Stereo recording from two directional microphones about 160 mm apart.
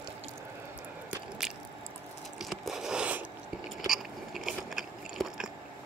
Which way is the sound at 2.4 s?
Centre (ahead or behind).